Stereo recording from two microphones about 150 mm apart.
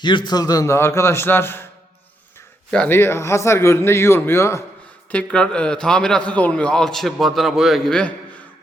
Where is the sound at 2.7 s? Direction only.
10° left (ahead or behind).